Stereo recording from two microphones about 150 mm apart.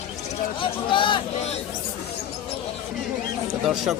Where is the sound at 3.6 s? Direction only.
Centre (ahead or behind).